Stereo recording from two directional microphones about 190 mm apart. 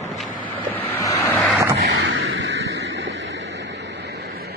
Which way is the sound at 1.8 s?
75° right (ahead or behind).